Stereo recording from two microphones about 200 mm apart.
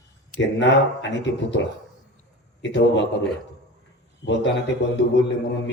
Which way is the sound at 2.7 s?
60° left (ahead or behind).